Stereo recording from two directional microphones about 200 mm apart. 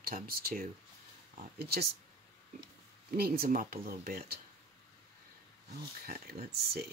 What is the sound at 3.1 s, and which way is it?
Speech, 50° right (ahead or behind).